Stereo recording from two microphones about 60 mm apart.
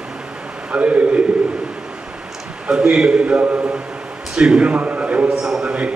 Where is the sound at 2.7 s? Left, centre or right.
Centre.